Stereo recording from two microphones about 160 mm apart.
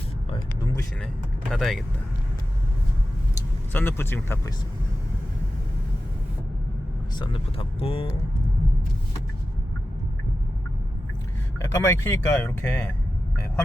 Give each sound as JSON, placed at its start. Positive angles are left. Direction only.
{"t": 0.3, "sound": "vehicle", "side_deg": 25}
{"t": 1.0, "sound": "speech", "side_deg": 5}
{"t": 3.7, "sound": "speech", "side_deg": 15}
{"t": 7.2, "sound": "speech", "side_deg": 35}
{"t": 11.6, "sound": "speech", "side_deg": 20}